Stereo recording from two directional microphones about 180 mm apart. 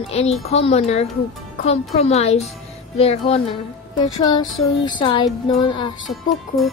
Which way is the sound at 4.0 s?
20° left (ahead or behind).